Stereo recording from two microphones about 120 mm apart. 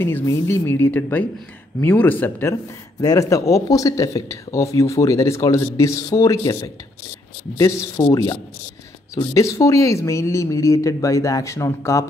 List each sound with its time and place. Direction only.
0.0 s speech: 20° left (ahead or behind)
3.0 s speech: 30° left (ahead or behind)
8.1 s a sound: 30° left (ahead or behind)
9.1 s speech: 30° left (ahead or behind)